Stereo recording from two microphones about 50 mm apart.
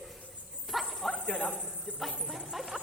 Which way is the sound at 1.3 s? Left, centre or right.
Left.